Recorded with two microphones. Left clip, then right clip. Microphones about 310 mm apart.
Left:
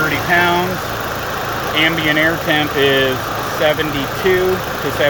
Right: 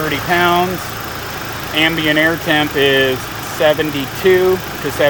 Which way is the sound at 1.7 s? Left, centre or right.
Centre.